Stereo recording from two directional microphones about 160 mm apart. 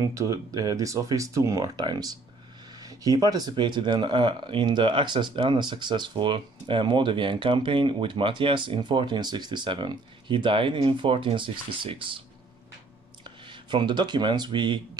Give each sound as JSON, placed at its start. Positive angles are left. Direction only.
{"t": 0.0, "sound": "speech", "side_deg": -20}
{"t": 13.5, "sound": "speech", "side_deg": -30}